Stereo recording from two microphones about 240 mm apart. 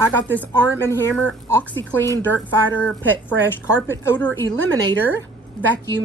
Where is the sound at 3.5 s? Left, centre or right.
Centre.